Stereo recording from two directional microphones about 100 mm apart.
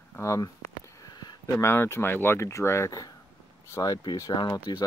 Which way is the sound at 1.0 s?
45° left (ahead or behind).